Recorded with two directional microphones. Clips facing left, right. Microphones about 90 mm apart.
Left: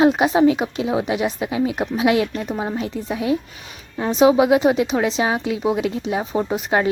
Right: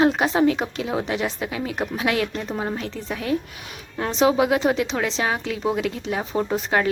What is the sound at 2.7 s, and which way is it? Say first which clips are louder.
A woman's voice: left 5 dB; 15° left (ahead or behind).